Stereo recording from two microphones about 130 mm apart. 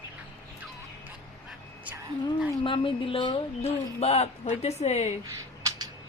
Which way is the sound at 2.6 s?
40° left (ahead or behind).